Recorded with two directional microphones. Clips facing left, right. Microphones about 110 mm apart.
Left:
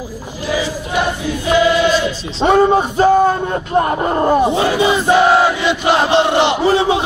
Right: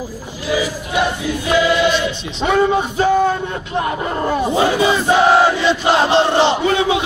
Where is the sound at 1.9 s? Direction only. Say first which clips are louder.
Left 2 dB; 35° left (ahead or behind).